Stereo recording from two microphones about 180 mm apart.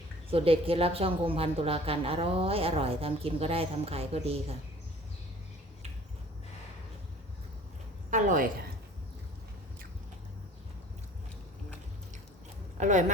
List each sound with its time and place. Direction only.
0.3 s a woman's voice: 30° right (ahead or behind)
8.1 s a sound: 45° right (ahead or behind)
12.7 s speech: 40° right (ahead or behind)